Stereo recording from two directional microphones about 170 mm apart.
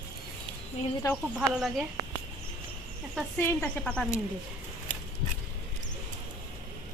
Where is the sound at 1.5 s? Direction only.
5° right (ahead or behind).